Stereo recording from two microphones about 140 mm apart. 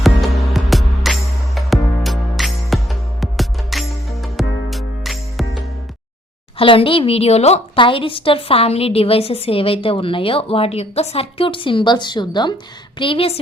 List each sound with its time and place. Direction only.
0.0 s music: centre (ahead or behind)
6.6 s a woman's voice: 40° left (ahead or behind)